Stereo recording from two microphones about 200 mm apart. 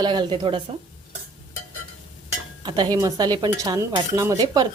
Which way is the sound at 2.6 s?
25° right (ahead or behind).